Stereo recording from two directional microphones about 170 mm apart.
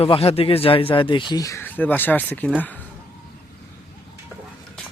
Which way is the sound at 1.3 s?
20° left (ahead or behind).